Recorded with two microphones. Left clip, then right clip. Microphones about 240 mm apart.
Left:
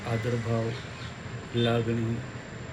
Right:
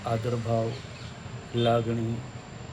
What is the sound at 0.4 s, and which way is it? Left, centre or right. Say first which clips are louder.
Speech: right 3 dB; centre.